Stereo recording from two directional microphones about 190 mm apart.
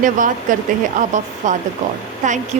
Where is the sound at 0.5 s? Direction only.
45° right (ahead or behind).